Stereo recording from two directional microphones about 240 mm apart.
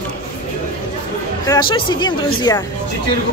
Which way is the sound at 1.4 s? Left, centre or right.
Centre.